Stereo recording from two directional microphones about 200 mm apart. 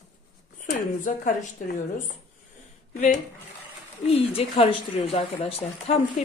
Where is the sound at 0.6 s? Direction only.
40° left (ahead or behind).